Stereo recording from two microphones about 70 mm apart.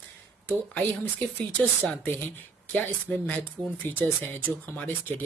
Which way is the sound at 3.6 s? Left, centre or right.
Right.